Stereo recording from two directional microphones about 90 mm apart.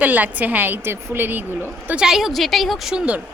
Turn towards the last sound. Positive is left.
turn(degrees=-10)  # may be behind; listen again after turning